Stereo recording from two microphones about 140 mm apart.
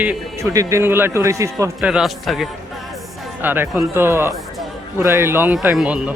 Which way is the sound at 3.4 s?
15° right (ahead or behind).